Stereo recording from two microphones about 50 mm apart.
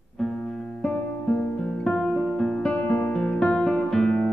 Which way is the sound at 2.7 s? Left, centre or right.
Left.